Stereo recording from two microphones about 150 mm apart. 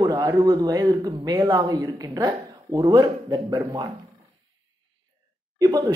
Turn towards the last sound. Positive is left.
turn(degrees=-25)  # may be behind; listen again after turning